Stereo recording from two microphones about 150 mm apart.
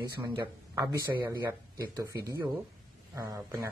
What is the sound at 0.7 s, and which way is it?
Speech, 25° right (ahead or behind).